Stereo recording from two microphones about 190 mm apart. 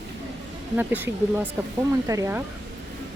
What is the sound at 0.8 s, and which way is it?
Speech, 10° right (ahead or behind).